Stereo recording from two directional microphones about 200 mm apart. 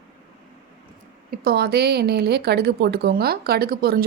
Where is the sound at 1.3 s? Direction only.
50° right (ahead or behind).